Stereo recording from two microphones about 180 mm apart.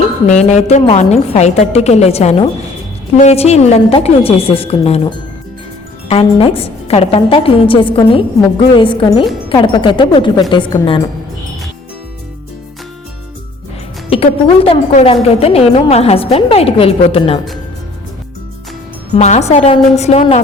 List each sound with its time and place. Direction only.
0.3 s a woman's voice: 40° left (ahead or behind)
14.4 s a woman's voice: 30° left (ahead or behind)
19.1 s a woman's voice: 40° left (ahead or behind)